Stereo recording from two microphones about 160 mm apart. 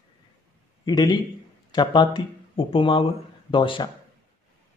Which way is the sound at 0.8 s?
25° left (ahead or behind).